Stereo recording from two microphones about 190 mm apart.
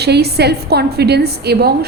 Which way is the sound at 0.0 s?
60° right (ahead or behind).